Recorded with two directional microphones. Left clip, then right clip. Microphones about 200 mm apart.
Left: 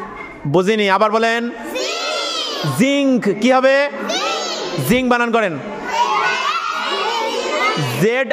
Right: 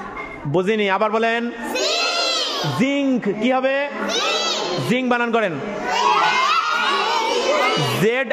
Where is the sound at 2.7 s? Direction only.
25° left (ahead or behind).